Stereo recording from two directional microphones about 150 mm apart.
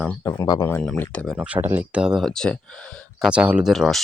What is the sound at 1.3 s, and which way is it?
Speech, 10° right (ahead or behind).